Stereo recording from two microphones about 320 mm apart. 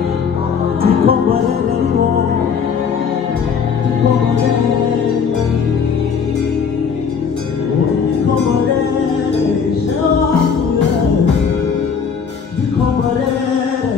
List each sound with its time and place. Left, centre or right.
0.8 s music: right